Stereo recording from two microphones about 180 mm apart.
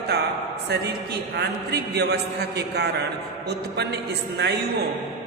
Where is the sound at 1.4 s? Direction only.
65° right (ahead or behind).